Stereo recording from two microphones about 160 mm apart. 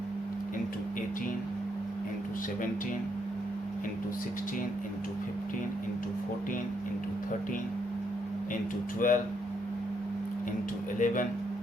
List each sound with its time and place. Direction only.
9.0 s speech: 55° left (ahead or behind)
11.0 s speech: 55° left (ahead or behind)